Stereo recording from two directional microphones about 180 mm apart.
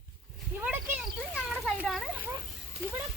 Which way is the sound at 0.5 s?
10° right (ahead or behind).